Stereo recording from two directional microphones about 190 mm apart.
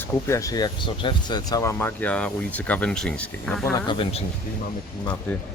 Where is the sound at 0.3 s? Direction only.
15° left (ahead or behind).